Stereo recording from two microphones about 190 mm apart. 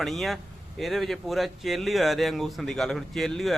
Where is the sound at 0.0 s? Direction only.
Centre (ahead or behind).